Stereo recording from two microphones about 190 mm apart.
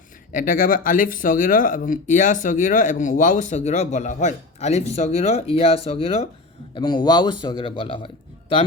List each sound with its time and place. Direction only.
0.3 s a man's voice: 45° left (ahead or behind); by 8.6 s 25° left (ahead or behind)